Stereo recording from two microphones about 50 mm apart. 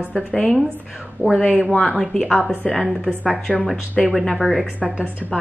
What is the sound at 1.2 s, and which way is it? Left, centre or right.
Speech, right.